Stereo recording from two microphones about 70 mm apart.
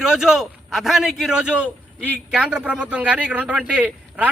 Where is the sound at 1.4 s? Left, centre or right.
Centre.